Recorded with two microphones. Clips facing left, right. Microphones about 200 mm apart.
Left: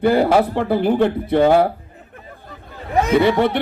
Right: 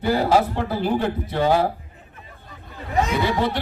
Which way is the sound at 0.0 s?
60° left (ahead or behind).